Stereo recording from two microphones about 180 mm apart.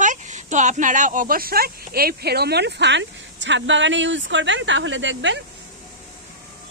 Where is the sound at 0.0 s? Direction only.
45° right (ahead or behind); by 5.4 s 90° right.